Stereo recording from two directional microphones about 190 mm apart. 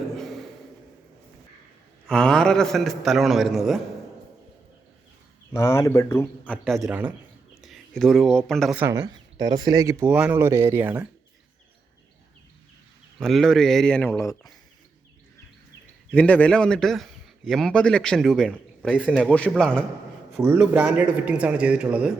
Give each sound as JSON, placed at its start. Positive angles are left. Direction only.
{"t": 0.2, "sound": "a sound", "side_deg": 0}
{"t": 2.0, "sound": "a man's voice", "side_deg": 5}
{"t": 5.5, "sound": "a man's voice", "side_deg": 15}
{"t": 8.7, "sound": "speech", "side_deg": -10}
{"t": 13.1, "sound": "a man's voice", "side_deg": 0}
{"t": 16.1, "sound": "a man's voice", "side_deg": 5}
{"t": 20.4, "sound": "speech", "side_deg": -10}